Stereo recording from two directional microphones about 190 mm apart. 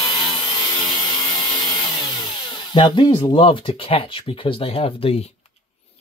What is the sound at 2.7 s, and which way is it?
Speech, 25° left (ahead or behind).